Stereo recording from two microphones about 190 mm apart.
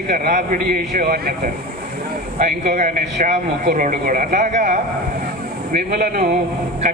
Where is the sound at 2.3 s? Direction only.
40° right (ahead or behind).